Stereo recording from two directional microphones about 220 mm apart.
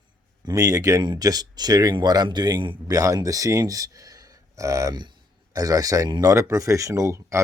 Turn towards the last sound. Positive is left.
turn(degrees=-15)  # may be behind; listen again after turning